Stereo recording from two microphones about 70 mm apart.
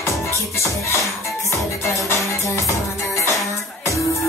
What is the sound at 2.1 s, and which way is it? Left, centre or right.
Music, left.